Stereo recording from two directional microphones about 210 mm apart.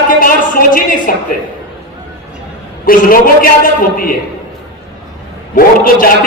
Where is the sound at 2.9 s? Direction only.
40° left (ahead or behind).